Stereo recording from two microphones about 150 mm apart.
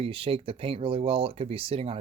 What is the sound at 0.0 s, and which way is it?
Speech, 40° right (ahead or behind).